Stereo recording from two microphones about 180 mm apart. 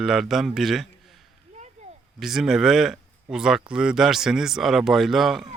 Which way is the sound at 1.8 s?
40° right (ahead or behind).